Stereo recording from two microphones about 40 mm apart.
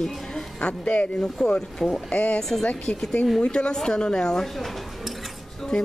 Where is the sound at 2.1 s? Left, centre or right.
Left.